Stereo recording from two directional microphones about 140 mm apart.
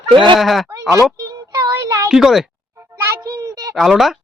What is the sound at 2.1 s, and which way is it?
Speech, 5° right (ahead or behind).